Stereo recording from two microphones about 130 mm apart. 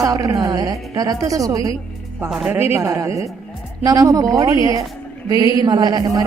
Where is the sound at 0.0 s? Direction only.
25° right (ahead or behind).